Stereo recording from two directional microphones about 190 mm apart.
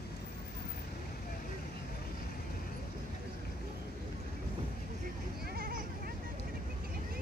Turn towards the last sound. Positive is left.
turn(degrees=-50)  # may be behind; listen again after turning